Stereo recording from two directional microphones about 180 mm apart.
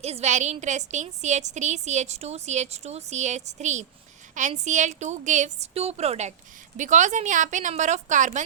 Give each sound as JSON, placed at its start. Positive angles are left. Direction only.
{"t": 0.0, "sound": "a woman's voice", "side_deg": -35}